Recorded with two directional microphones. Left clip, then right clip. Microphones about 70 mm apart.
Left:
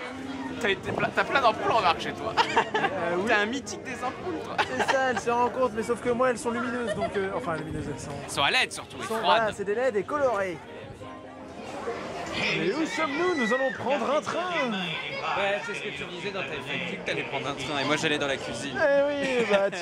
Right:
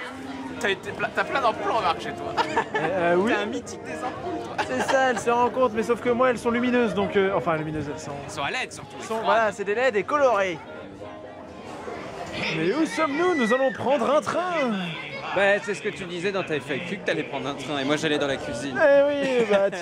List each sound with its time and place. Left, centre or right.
0.6 s speech: centre
4.6 s speech: centre
6.5 s speech: centre
7.3 s speech: centre
8.4 s speech: centre
9.1 s speech: centre
12.4 s speech: centre
15.3 s speech: right
17.3 s speech: centre